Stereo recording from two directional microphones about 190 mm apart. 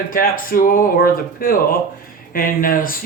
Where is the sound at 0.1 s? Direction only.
50° left (ahead or behind).